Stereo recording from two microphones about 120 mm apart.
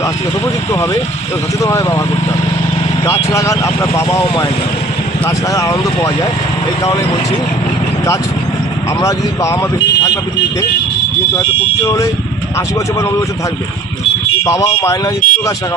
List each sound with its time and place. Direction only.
1.6 s speech: 25° left (ahead or behind)
3.3 s speech: 30° left (ahead or behind)
5.2 s speech: 25° left (ahead or behind)
9.0 s speech: 25° left (ahead or behind)
12.5 s speech: 25° left (ahead or behind)
14.4 s speech: 25° left (ahead or behind)